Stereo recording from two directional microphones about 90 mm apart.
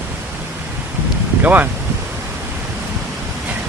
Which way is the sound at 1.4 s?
20° right (ahead or behind).